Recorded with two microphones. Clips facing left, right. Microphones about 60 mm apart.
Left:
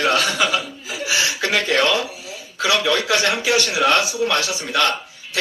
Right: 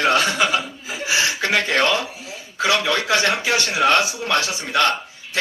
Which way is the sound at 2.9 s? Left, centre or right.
Right.